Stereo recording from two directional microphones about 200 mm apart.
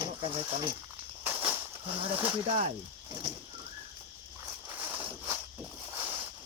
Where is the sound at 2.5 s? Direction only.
30° right (ahead or behind).